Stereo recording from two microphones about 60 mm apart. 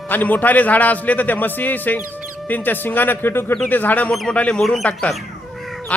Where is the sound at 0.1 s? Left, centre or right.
Left.